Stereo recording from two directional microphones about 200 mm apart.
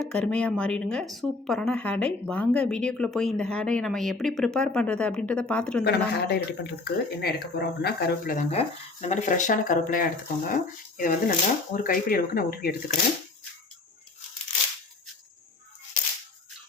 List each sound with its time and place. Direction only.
0.0 s speech: 5° left (ahead or behind)
5.8 s speech: 50° left (ahead or behind)